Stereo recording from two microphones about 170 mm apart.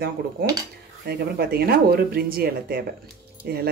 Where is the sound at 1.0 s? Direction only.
70° right (ahead or behind).